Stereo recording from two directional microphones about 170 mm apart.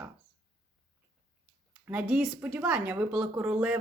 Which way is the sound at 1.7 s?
5° right (ahead or behind).